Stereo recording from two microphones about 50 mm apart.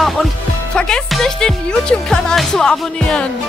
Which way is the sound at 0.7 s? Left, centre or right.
Centre.